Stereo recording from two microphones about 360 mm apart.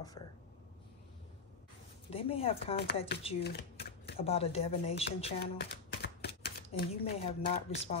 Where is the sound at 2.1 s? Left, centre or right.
Centre.